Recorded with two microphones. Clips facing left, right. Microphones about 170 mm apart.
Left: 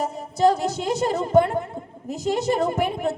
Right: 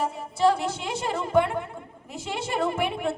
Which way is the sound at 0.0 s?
40° left (ahead or behind).